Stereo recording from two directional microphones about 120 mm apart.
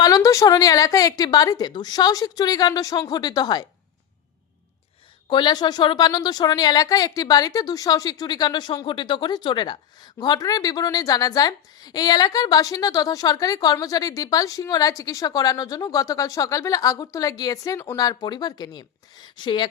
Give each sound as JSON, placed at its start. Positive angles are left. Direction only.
{"t": 0.0, "sound": "a woman's voice", "side_deg": 30}
{"t": 5.3, "sound": "a woman's voice", "side_deg": 40}